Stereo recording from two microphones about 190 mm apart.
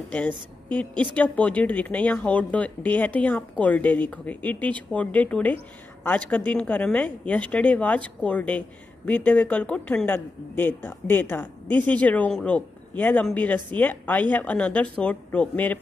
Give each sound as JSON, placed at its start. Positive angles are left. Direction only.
{"t": 0.7, "sound": "speech", "side_deg": 5}